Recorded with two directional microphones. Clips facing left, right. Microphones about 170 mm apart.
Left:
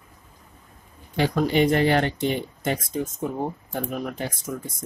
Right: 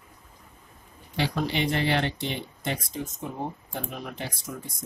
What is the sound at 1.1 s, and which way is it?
Speech, 50° left (ahead or behind).